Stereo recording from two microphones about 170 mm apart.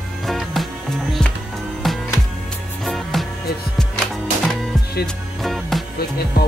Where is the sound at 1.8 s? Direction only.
Centre (ahead or behind).